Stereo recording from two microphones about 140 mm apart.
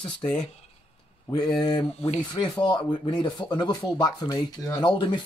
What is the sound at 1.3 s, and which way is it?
Speech, 30° left (ahead or behind).